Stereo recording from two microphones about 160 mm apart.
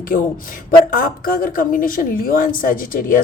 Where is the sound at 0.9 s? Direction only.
65° left (ahead or behind).